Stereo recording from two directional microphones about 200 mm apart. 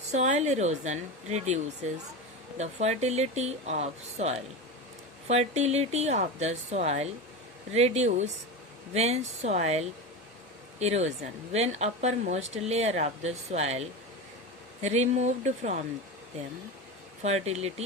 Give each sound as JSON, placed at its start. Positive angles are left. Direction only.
{"t": 0.1, "sound": "speech", "side_deg": -35}
{"t": 17.2, "sound": "speech", "side_deg": -35}